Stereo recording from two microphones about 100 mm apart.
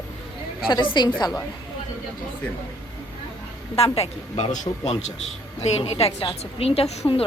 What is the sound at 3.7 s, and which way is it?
Speech, 85° left.